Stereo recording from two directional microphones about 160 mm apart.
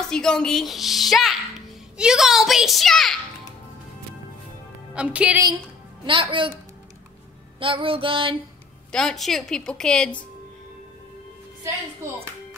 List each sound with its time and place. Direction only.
0.0 s a woman's voice: 5° left (ahead or behind)
4.9 s a woman's voice: 5° right (ahead or behind)
6.0 s music: 30° right (ahead or behind)
7.6 s music: 35° right (ahead or behind)
8.9 s a woman's voice: centre (ahead or behind)